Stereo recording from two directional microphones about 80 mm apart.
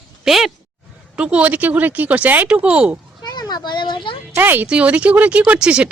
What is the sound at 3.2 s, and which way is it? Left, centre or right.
Speech, left.